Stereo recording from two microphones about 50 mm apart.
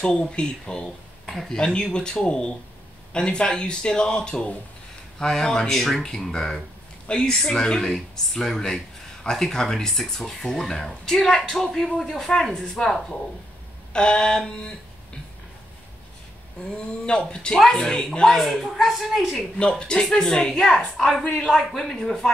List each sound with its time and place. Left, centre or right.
0.0 s speech: centre
1.2 s speech: centre
1.6 s speech: centre
13.9 s speech: centre
16.7 s speech: centre
17.6 s a woman's voice: centre
19.7 s speech: centre
21.5 s a woman's voice: centre